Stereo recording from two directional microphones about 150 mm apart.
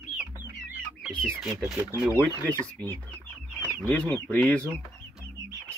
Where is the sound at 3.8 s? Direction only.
10° left (ahead or behind).